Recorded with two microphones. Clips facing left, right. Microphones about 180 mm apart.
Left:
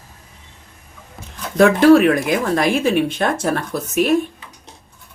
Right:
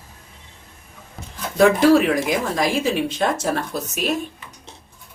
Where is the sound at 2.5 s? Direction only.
55° left (ahead or behind).